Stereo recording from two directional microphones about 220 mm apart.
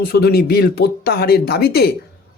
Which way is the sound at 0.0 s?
45° left (ahead or behind).